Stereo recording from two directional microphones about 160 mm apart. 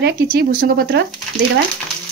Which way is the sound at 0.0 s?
80° right.